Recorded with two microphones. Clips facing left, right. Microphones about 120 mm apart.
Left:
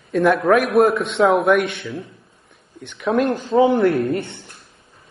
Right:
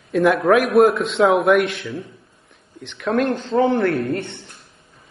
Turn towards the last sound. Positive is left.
turn(degrees=5)  # may be behind; listen again after turning